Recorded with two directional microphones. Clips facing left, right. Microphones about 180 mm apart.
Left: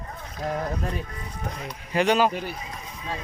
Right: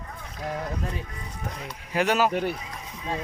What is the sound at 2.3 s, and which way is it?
Speech, 60° right (ahead or behind).